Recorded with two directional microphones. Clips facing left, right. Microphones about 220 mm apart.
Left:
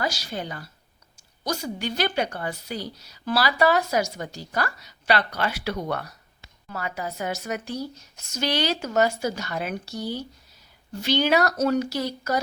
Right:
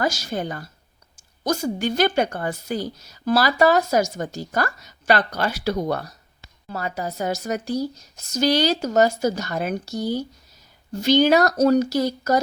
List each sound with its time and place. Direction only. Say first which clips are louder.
0.0 s a woman's voice: right 5 dB; 45° right (ahead or behind)